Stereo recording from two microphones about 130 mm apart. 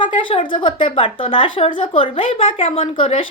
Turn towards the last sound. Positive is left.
turn(degrees=45)  # may be behind; listen again after turning